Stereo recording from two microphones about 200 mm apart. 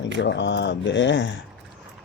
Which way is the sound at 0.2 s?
65° left (ahead or behind).